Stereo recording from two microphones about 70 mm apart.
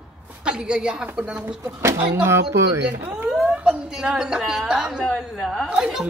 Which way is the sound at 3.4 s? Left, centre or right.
Centre.